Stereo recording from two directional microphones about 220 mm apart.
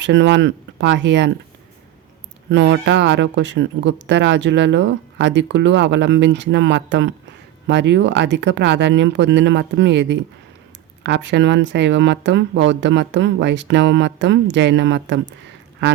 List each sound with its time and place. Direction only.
0.0 s speech: 55° right (ahead or behind)
2.5 s speech: 55° right (ahead or behind)